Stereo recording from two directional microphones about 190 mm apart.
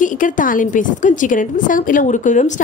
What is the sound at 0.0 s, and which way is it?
A woman's voice, 45° left (ahead or behind).